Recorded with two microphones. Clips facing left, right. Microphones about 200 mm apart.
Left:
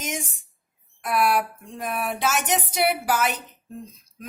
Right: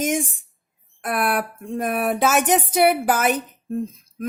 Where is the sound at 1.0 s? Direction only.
50° right (ahead or behind).